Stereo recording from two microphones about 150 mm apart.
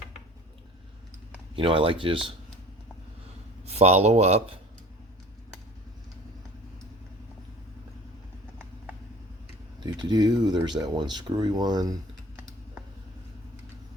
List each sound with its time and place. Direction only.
1.5 s speech: 35° right (ahead or behind)
3.7 s speech: 45° right (ahead or behind)
9.8 s speech: 30° right (ahead or behind)